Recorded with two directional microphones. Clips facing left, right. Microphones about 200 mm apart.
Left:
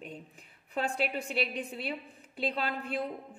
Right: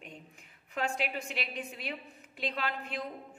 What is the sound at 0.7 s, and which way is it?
A woman's voice, 35° left (ahead or behind).